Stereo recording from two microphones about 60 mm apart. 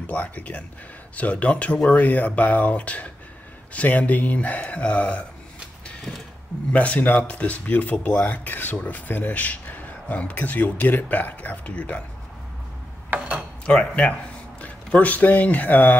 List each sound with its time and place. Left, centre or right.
0.0 s speech: left
6.7 s speech: left
13.7 s speech: centre